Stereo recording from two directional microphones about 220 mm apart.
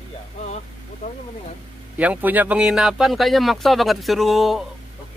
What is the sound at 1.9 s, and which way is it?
Speech, 5° right (ahead or behind).